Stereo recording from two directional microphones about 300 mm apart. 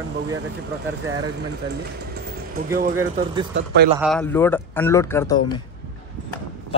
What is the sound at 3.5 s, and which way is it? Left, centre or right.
Speech, right.